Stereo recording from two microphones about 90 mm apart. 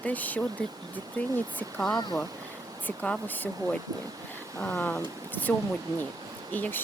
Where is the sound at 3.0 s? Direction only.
15° left (ahead or behind).